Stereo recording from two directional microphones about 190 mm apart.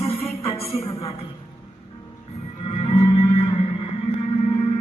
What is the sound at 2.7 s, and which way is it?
Music, 30° left (ahead or behind).